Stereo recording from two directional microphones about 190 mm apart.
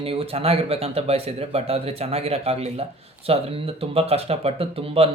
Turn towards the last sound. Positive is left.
turn(degrees=-30)  # may be behind; listen again after turning